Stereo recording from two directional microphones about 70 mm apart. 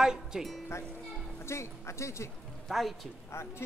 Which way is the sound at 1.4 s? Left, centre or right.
Left.